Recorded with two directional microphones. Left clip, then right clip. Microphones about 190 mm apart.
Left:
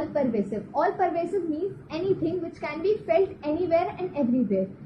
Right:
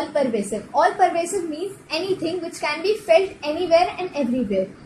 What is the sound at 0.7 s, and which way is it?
A woman's voice, 50° right (ahead or behind).